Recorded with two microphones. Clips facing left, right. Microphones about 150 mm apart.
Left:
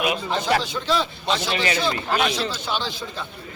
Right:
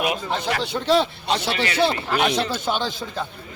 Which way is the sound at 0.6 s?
65° right (ahead or behind).